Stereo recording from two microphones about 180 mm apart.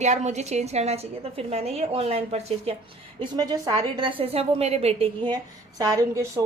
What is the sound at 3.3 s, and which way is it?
A woman's voice, 20° right (ahead or behind).